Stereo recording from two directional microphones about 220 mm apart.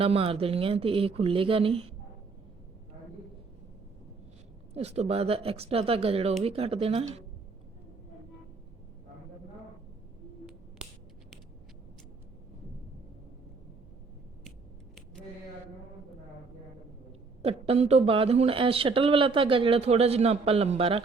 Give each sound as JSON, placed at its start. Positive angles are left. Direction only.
{"t": 0.0, "sound": "speech", "side_deg": -25}
{"t": 4.7, "sound": "speech", "side_deg": -30}
{"t": 17.4, "sound": "speech", "side_deg": -30}